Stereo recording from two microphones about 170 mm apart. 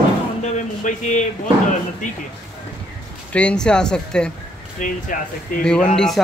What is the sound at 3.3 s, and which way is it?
Speech, 5° left (ahead or behind).